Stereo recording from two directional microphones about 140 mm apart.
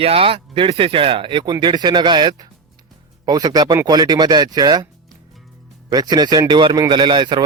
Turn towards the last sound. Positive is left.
turn(degrees=-35)  # may be behind; listen again after turning